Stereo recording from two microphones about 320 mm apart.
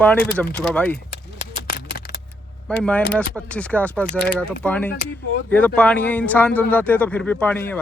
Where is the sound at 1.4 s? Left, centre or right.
Left.